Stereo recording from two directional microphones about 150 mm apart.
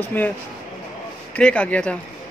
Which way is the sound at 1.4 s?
10° left (ahead or behind).